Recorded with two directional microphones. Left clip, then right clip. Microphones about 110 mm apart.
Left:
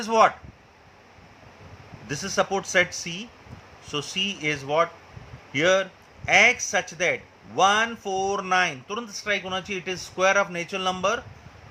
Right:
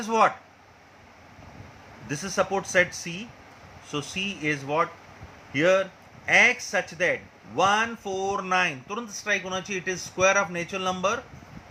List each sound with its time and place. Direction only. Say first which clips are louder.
0.0 s speech: left 3 dB; 15° left (ahead or behind)
2.0 s speech: left 1 dB; 10° left (ahead or behind)